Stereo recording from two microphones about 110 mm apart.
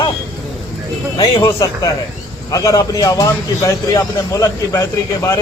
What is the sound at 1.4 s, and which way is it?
A man's voice, 30° left (ahead or behind).